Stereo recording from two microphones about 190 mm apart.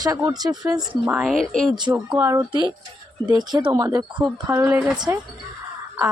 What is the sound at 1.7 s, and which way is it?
Speech, 20° right (ahead or behind).